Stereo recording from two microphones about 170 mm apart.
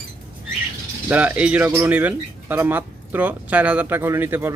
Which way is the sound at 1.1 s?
10° right (ahead or behind).